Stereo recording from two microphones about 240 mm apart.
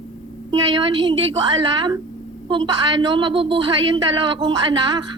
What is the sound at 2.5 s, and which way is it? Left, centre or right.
A woman's voice, centre.